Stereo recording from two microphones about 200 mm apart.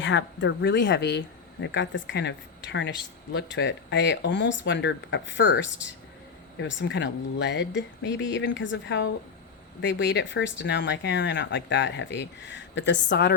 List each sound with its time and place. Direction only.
0.0 s speech: 65° left (ahead or behind)